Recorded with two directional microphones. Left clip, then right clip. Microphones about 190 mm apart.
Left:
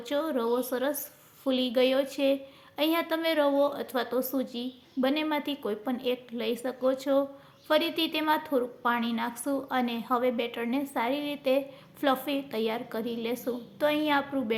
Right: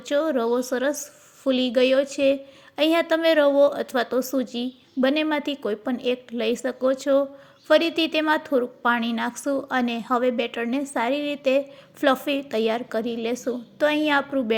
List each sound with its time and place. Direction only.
0.0 s a woman's voice: 25° right (ahead or behind)